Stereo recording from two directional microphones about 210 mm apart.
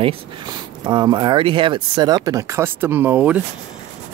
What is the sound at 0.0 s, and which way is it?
Speech, 25° right (ahead or behind).